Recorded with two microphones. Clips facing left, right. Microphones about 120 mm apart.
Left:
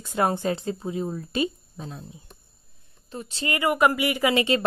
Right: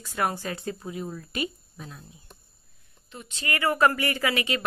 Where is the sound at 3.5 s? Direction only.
15° left (ahead or behind).